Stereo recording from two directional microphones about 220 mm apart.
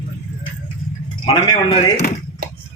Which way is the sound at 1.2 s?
20° left (ahead or behind).